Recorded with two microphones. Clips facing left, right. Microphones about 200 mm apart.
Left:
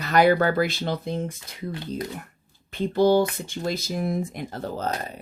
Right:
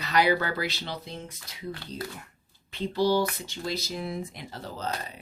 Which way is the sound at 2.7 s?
50° left (ahead or behind).